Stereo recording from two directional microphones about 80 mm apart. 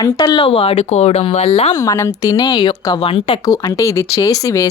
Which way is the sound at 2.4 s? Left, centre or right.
Left.